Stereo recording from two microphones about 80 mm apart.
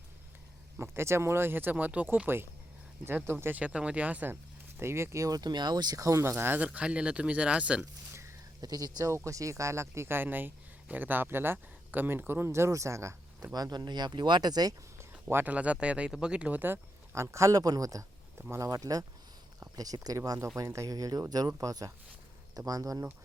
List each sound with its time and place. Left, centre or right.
0.8 s speech: right
4.8 s speech: right
5.4 s speech: right
6.7 s speech: centre
8.6 s speech: right
9.1 s speech: right
13.5 s speech: right
14.9 s a sound: right
15.4 s speech: centre; by 23.0 s right